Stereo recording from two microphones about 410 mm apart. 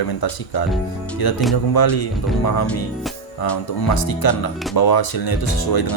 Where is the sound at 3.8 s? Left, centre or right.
Left.